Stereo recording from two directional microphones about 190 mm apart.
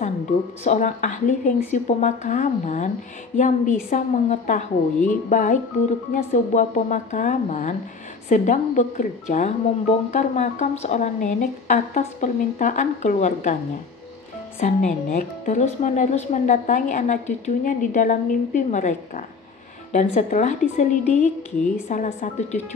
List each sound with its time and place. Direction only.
0.7 s speech: 40° left (ahead or behind)
14.6 s speech: 40° left (ahead or behind)